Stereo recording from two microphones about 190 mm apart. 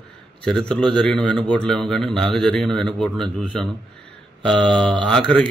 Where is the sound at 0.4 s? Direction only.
5° left (ahead or behind).